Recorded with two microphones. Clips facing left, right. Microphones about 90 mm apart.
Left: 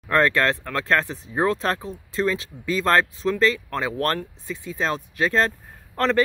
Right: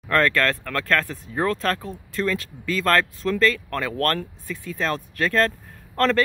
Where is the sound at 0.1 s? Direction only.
20° left (ahead or behind).